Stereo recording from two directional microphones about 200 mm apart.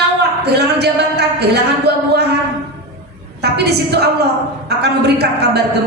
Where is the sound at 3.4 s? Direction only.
55° right (ahead or behind).